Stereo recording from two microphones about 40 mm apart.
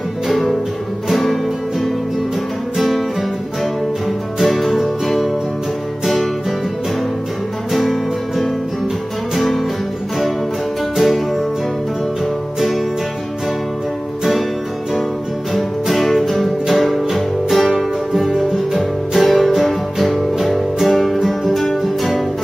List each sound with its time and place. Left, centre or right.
0.3 s music: centre
4.4 s music: centre
7.7 s music: centre
11.0 s music: centre
12.5 s music: centre
15.5 s music: centre